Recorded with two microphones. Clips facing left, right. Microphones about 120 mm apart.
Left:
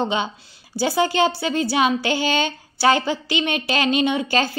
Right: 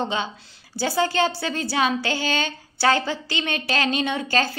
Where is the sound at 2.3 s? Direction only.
40° right (ahead or behind).